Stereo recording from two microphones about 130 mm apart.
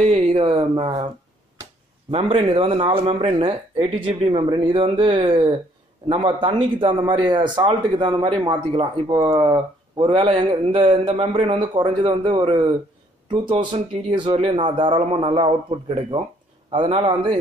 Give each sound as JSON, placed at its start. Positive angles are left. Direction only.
{"t": 0.1, "sound": "a man's voice", "side_deg": -45}
{"t": 14.3, "sound": "a man's voice", "side_deg": -50}